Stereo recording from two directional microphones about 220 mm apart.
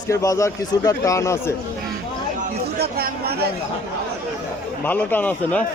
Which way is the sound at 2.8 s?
45° right (ahead or behind).